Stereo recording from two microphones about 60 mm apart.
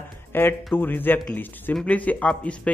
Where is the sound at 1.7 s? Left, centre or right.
Centre.